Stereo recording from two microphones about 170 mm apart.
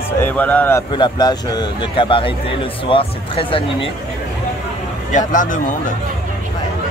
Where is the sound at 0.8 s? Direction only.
25° left (ahead or behind).